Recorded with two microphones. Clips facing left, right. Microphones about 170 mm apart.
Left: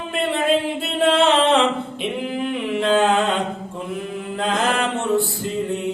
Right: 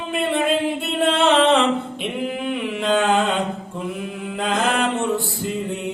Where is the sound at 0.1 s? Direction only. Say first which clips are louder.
Left 1 dB; centre (ahead or behind).